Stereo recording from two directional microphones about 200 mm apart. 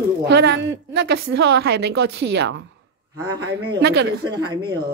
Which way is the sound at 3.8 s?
55° right (ahead or behind).